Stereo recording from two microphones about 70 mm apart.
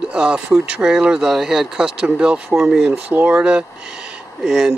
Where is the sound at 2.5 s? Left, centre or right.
Centre.